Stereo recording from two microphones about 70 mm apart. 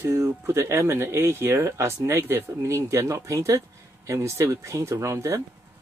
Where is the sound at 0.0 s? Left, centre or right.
Right.